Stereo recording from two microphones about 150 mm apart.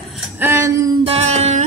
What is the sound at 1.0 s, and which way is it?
Music, 45° right (ahead or behind).